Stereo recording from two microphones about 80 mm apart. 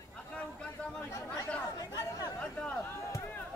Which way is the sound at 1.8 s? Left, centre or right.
Left.